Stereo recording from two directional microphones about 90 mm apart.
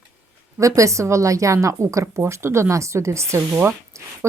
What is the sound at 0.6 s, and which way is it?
Speech, 35° right (ahead or behind).